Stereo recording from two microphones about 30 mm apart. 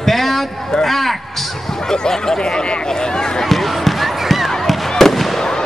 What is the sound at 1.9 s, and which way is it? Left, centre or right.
Speech, centre.